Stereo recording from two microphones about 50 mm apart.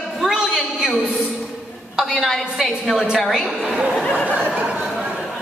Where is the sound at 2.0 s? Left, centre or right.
Centre.